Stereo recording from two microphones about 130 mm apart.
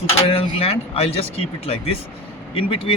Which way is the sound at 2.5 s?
45° left (ahead or behind).